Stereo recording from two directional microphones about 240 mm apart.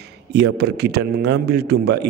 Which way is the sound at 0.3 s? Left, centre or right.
Right.